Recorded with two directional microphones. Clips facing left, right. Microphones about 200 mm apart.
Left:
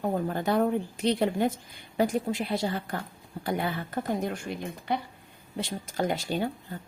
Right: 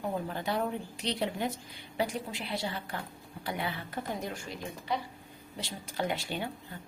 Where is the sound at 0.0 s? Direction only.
45° left (ahead or behind).